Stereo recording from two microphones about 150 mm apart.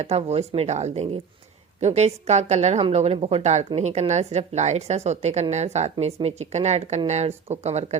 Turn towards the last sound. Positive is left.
turn(degrees=-50)  # may be behind; listen again after turning